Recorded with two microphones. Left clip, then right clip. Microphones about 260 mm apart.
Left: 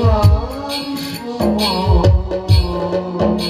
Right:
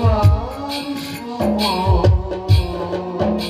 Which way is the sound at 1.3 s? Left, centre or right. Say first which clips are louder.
Left 2 dB; left.